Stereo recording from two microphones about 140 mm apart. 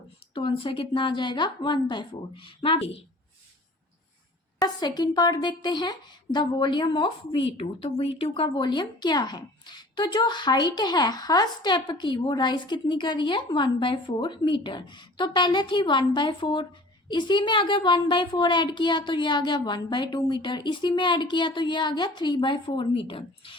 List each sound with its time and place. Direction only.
0.3 s speech: 40° left (ahead or behind)
4.6 s speech: 30° left (ahead or behind)